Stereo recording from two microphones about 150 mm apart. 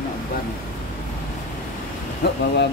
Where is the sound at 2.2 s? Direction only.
90° left.